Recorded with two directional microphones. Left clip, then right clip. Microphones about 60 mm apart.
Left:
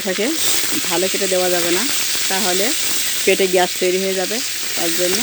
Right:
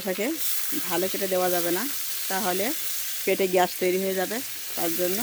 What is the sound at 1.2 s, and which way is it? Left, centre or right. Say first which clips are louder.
Speech: left 7 dB; centre.